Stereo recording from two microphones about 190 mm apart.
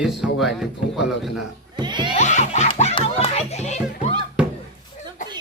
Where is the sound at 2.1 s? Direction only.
40° left (ahead or behind).